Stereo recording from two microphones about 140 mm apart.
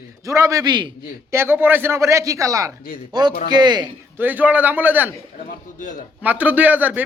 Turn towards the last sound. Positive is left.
turn(degrees=-10)  # may be behind; listen again after turning